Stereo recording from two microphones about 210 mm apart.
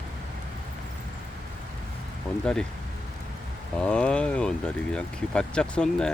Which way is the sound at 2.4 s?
5° left (ahead or behind).